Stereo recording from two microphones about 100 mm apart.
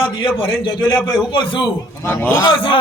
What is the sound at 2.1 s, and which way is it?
Speech, 20° left (ahead or behind).